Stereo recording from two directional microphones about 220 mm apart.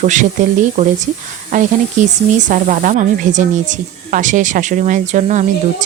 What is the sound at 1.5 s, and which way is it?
Speech, 35° right (ahead or behind).